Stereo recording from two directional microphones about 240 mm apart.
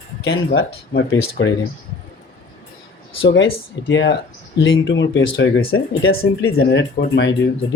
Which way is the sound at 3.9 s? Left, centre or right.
Left.